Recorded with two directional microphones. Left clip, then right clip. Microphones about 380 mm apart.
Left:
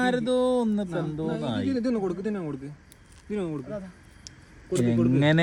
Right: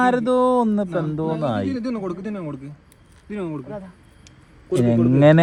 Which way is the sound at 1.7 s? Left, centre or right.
Centre.